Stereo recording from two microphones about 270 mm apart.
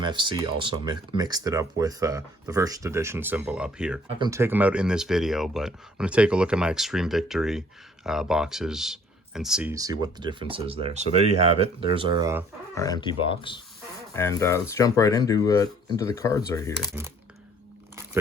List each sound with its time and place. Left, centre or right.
0.0 s speech: centre
12.7 s speech: centre
16.8 s speech: centre